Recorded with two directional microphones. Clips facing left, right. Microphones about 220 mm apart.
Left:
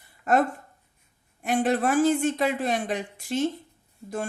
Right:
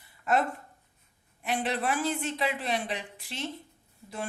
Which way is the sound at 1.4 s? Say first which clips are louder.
Left 7 dB; 45° left (ahead or behind).